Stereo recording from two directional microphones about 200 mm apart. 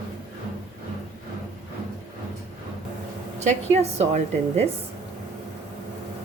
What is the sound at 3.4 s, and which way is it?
A woman's voice, 35° right (ahead or behind).